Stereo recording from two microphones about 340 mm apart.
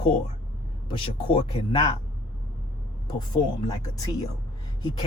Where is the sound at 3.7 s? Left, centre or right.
Centre.